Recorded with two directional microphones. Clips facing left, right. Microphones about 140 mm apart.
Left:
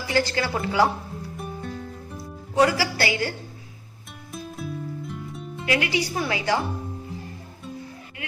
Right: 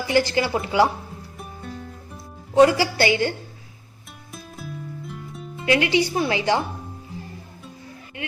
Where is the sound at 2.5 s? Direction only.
25° right (ahead or behind).